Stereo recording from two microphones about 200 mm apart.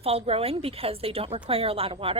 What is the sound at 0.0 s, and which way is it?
A woman's voice, 30° right (ahead or behind).